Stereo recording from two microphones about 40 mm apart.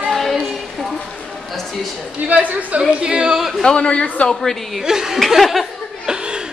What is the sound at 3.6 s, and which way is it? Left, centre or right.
Speech, centre.